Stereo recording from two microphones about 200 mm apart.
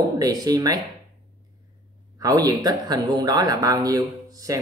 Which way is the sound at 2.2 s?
20° right (ahead or behind).